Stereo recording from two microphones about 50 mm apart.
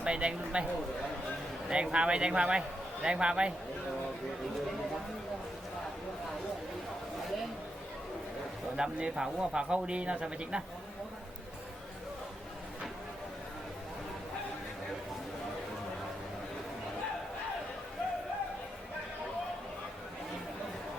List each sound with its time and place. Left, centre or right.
0.0 s speech: centre
1.7 s speech: centre
8.7 s speech: centre